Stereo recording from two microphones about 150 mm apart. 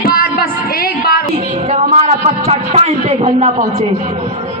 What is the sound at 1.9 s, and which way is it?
A man's voice, 40° right (ahead or behind).